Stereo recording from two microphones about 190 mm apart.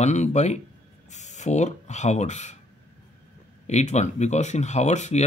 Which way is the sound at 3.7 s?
35° left (ahead or behind).